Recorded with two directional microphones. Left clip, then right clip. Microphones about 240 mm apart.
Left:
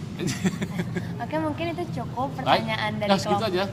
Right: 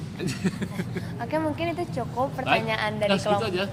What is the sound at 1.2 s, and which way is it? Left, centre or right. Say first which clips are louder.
A woman's voice: right 1 dB; centre.